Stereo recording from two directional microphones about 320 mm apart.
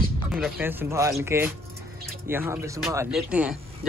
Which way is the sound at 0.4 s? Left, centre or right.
Centre.